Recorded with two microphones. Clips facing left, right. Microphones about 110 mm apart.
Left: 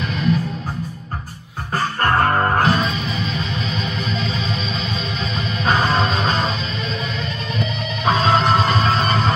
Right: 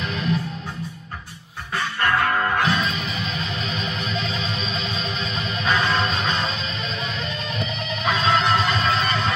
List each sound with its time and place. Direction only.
1.7 s music: 40° left (ahead or behind)
5.7 s music: 40° left (ahead or behind)
8.0 s music: 40° left (ahead or behind)